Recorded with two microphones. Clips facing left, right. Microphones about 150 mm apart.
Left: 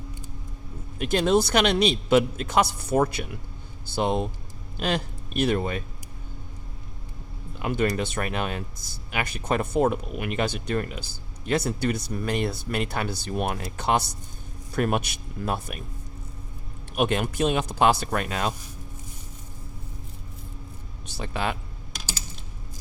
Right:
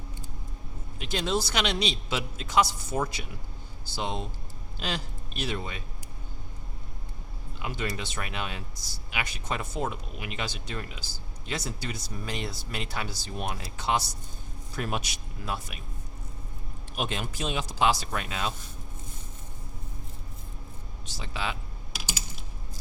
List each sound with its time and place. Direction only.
0.9 s speech: 50° left (ahead or behind)
7.6 s speech: 50° left (ahead or behind)
16.9 s speech: 60° left (ahead or behind)
21.2 s speech: 55° left (ahead or behind)